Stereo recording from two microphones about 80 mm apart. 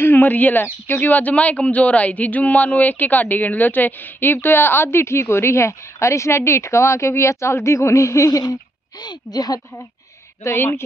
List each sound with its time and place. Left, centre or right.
0.0 s speech: left
8.3 s speech: left
10.4 s a woman's voice: left